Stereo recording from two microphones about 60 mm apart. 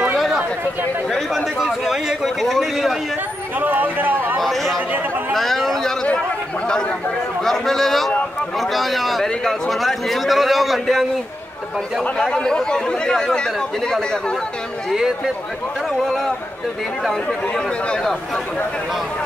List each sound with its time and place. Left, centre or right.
1.3 s a man's voice: centre
3.5 s a sound: right
4.4 s chatter: centre
5.3 s a sound: centre
6.7 s chatter: centre
7.4 s a man's voice: centre
12.0 s speech: centre
14.9 s a man's voice: centre